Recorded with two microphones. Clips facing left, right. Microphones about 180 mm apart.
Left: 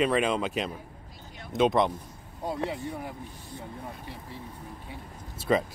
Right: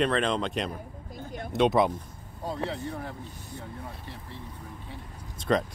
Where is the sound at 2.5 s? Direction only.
15° left (ahead or behind).